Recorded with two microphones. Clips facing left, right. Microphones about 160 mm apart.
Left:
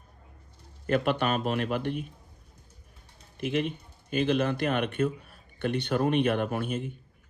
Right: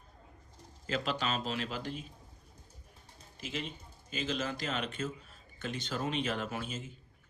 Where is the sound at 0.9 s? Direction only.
60° left (ahead or behind).